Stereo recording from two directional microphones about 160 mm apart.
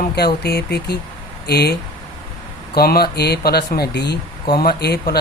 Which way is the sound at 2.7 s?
75° left (ahead or behind).